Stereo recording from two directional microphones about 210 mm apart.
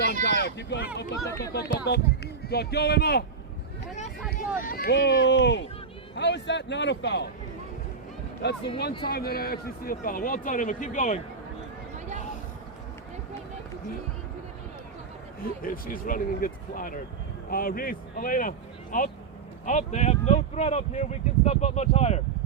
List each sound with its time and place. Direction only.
0.0 s speech: 50° left (ahead or behind)
4.3 s a man's voice: 40° left (ahead or behind)
8.4 s speech: 55° left (ahead or behind); by 11.2 s 35° left (ahead or behind)
15.6 s speech: 40° left (ahead or behind)